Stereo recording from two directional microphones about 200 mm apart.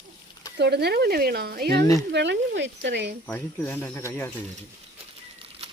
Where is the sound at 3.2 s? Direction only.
10° left (ahead or behind).